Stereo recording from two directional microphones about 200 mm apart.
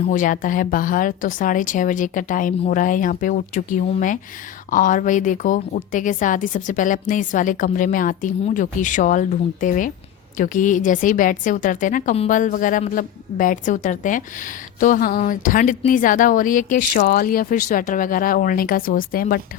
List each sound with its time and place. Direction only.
0.1 s a woman's voice: 40° left (ahead or behind)